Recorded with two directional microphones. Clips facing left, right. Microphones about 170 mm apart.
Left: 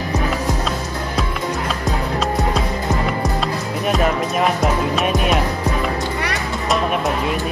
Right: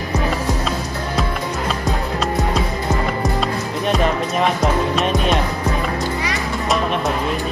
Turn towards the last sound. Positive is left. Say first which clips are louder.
# even
turn(degrees=0)  # may be behind; listen again after turning